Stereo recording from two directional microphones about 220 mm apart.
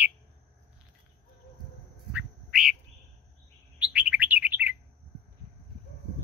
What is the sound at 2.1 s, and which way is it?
Duck, 5° right (ahead or behind).